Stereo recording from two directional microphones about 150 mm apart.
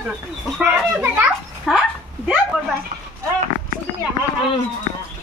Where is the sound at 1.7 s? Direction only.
5° right (ahead or behind).